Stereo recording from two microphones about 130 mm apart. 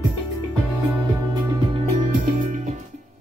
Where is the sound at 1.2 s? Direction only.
25° right (ahead or behind).